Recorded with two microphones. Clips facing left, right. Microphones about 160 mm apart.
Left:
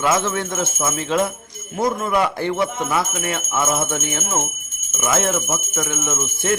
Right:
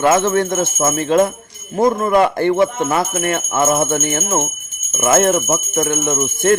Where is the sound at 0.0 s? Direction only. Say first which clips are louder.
Right 6 dB; 55° right (ahead or behind).